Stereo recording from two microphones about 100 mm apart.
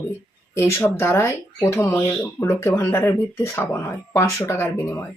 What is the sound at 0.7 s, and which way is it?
Speech, 25° left (ahead or behind).